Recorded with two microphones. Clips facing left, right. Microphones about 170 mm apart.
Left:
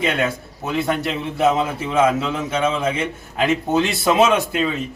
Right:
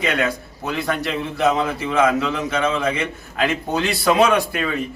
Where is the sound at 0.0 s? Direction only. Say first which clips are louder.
Even; 25° left (ahead or behind).